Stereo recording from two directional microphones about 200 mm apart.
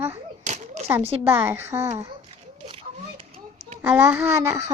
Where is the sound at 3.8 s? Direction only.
10° right (ahead or behind).